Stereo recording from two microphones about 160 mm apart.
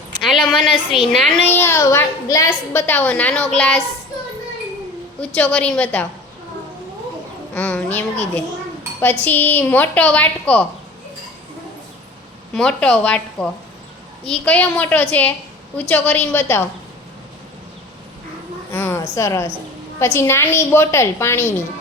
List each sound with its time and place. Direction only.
0.2 s a woman's voice: centre (ahead or behind)
1.5 s a woman's voice: 15° left (ahead or behind)
5.2 s a woman's voice: 10° left (ahead or behind)
7.5 s a woman's voice: 10° left (ahead or behind)
12.5 s a woman's voice: 5° left (ahead or behind)
18.7 s a woman's voice: 15° left (ahead or behind)